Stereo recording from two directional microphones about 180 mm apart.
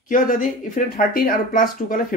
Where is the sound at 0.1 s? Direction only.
45° left (ahead or behind).